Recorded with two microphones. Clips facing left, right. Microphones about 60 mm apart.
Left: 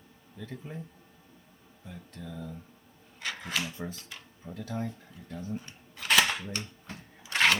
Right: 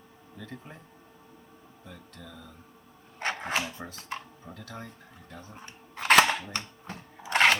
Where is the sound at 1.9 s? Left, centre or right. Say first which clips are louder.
Left 4 dB; centre.